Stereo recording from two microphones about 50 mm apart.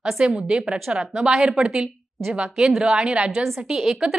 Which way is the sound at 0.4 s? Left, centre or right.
Centre.